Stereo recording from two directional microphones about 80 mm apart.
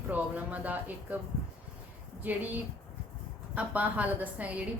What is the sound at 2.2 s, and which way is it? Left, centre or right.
A woman's voice, right.